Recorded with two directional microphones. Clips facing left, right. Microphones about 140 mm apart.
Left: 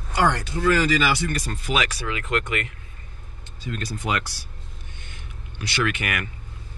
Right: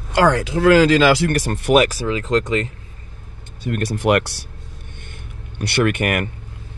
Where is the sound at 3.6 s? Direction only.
65° right (ahead or behind).